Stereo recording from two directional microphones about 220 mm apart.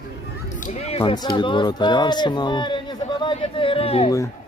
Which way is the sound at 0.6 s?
30° left (ahead or behind).